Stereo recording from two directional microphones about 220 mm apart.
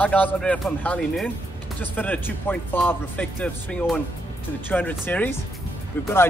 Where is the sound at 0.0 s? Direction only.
5° left (ahead or behind).